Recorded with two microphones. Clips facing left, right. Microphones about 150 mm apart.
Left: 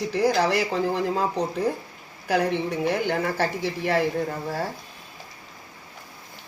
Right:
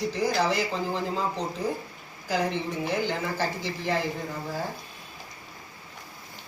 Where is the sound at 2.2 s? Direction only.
60° left (ahead or behind).